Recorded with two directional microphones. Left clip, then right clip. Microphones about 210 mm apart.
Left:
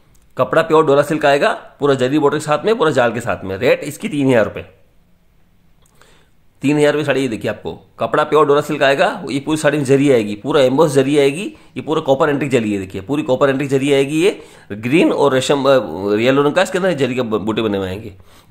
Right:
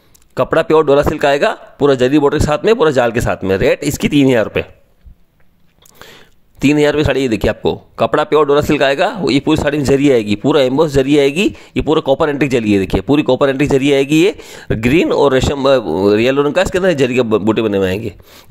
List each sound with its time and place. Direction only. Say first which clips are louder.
0.3 s speech: right 1 dB; 40° right (ahead or behind)
6.6 s speech: right 2 dB; 45° right (ahead or behind)